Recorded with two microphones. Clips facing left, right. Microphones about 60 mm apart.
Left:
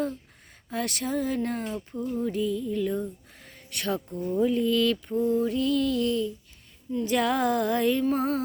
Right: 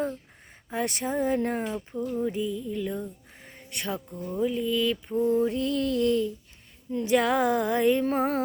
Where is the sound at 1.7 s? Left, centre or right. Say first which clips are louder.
Right 1 dB; centre.